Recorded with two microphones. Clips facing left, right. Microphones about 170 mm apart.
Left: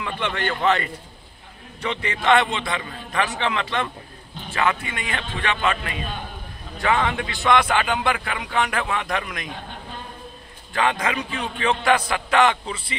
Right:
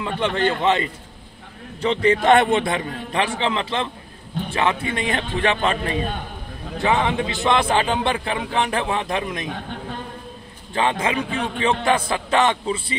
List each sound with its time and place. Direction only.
0.0 s a man's voice: 30° right (ahead or behind)
1.8 s a man's voice: 35° right (ahead or behind)
6.8 s a man's voice: 20° right (ahead or behind)
10.7 s a man's voice: 25° right (ahead or behind)